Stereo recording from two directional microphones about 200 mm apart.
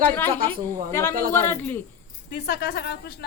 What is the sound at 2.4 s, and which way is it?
Speech, 55° left (ahead or behind).